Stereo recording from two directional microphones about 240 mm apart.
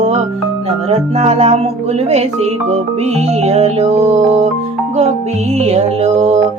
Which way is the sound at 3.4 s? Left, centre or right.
Right.